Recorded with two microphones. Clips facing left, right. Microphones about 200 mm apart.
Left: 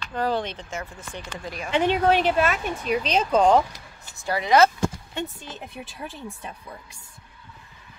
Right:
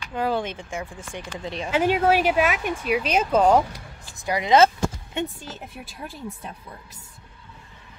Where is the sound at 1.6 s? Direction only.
5° right (ahead or behind).